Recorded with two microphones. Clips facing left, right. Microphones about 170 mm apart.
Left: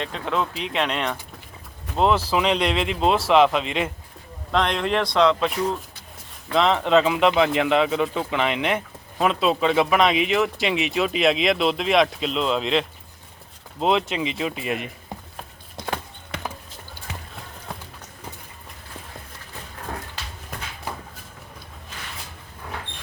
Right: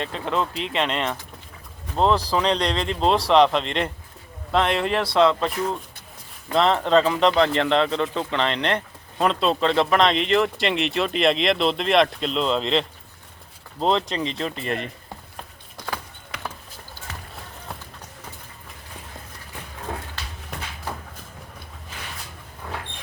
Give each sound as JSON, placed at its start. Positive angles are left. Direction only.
{"t": 0.0, "sound": "speech", "side_deg": 0}
{"t": 6.5, "sound": "speech", "side_deg": 0}
{"t": 15.8, "sound": "a sound", "side_deg": 25}